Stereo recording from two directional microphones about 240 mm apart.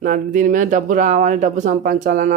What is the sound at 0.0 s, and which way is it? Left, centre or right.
Speech, right.